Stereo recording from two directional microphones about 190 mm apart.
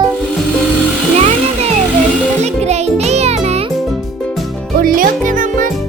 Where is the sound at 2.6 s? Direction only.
35° right (ahead or behind).